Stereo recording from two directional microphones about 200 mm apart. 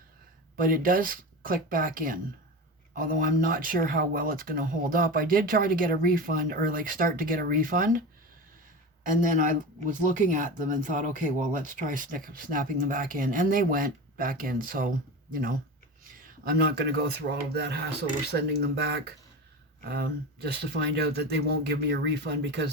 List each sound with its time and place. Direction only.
0.5 s speech: 45° right (ahead or behind)
9.0 s speech: 40° right (ahead or behind); by 22.7 s 55° right (ahead or behind)